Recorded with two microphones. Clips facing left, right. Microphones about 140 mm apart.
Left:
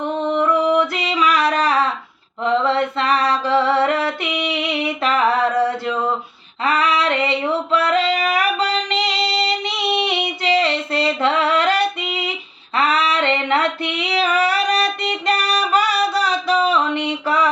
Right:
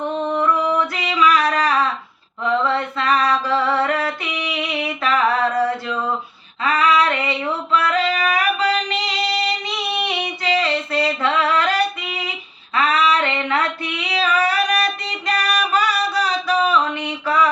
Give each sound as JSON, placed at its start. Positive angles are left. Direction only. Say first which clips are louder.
{"t": 0.3, "sound": "a sound", "louder": "left 4 dB", "side_deg": 25}
{"t": 2.4, "sound": "mantra", "louder": "left 2 dB", "side_deg": 30}
{"t": 6.7, "sound": "female singing", "louder": "right 1 dB", "side_deg": 25}